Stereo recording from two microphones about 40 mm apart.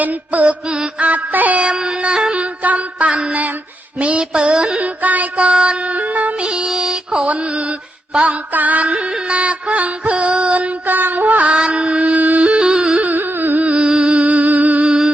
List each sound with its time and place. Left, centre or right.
0.0 s music: right
1.6 s music: right
2.6 s music: right
3.1 s music: right
4.8 s music: right
6.4 s music: right
6.7 s mantra: centre
8.1 s music: right
8.5 s music: right
10.8 s music: right
11.5 s music: right
12.5 s music: centre
13.0 s music: right
13.6 s music: right